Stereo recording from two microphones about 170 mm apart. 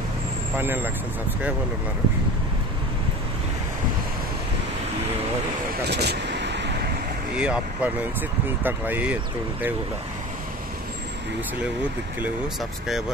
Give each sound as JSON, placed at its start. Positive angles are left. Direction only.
{"t": 0.6, "sound": "speech", "side_deg": -10}
{"t": 5.9, "sound": "vehicle", "side_deg": -75}
{"t": 7.3, "sound": "speech", "side_deg": -10}